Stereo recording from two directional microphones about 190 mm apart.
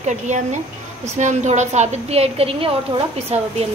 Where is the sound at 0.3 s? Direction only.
40° right (ahead or behind).